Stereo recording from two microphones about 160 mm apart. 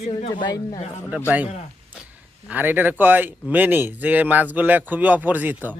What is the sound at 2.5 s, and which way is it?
Speech, 10° right (ahead or behind).